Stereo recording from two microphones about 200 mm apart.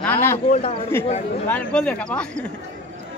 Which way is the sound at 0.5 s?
35° left (ahead or behind).